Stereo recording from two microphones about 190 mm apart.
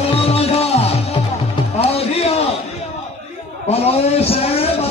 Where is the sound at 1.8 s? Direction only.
30° left (ahead or behind).